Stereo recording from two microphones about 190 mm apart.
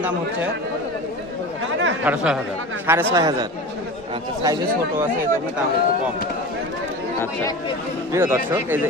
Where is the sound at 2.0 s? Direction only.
10° right (ahead or behind).